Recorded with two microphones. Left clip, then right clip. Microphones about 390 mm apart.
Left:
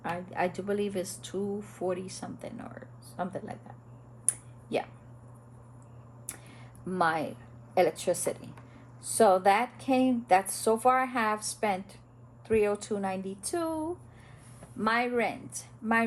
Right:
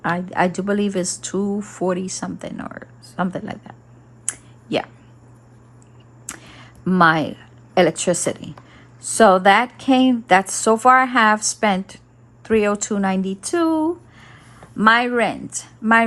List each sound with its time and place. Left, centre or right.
0.0 s speech: centre
6.2 s a sound: right
7.7 s speech: right